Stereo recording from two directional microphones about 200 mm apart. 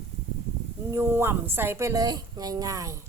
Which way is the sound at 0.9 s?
10° right (ahead or behind).